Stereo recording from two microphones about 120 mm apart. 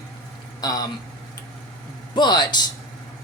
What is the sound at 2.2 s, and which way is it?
Speech, 35° left (ahead or behind).